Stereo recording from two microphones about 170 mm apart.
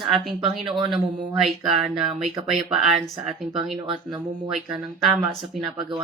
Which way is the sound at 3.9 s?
25° right (ahead or behind).